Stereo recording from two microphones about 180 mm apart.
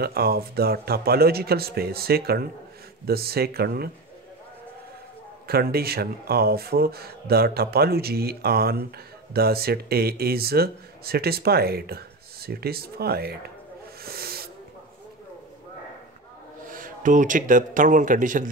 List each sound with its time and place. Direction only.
0.0 s speech: 60° right (ahead or behind)
5.5 s speech: 60° right (ahead or behind)
14.0 s owl: 60° right (ahead or behind)
16.6 s speech: 50° right (ahead or behind)